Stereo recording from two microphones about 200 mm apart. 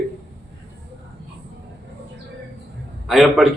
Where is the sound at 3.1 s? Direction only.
Centre (ahead or behind).